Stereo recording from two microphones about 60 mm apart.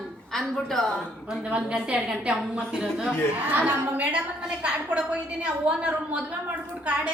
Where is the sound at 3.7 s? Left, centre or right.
Right.